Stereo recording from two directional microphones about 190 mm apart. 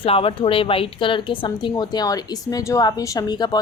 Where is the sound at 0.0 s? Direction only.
30° left (ahead or behind).